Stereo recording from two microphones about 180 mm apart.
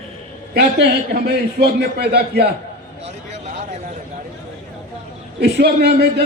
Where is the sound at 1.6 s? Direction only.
65° right (ahead or behind).